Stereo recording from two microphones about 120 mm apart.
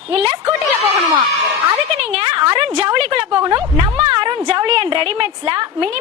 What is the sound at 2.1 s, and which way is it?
A woman's voice, 45° right (ahead or behind).